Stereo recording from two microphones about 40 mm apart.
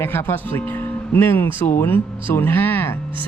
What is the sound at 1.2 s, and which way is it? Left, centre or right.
Speech, left.